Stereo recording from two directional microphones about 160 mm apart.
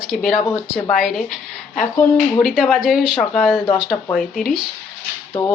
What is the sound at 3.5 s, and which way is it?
Speech, 30° left (ahead or behind).